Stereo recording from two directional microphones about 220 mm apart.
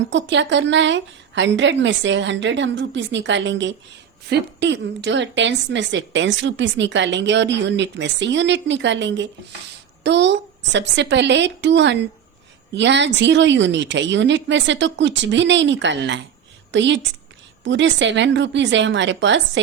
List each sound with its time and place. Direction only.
0.1 s a woman's voice: 55° right (ahead or behind)